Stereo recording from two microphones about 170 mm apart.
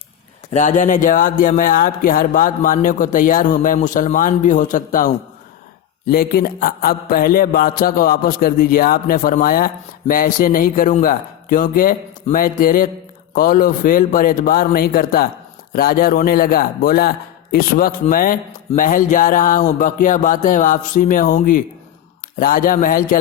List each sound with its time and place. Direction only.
0.5 s speech: 50° left (ahead or behind)
6.1 s mantra: 60° left (ahead or behind)
18.8 s speech: 55° left (ahead or behind)
22.4 s mantra: 55° left (ahead or behind)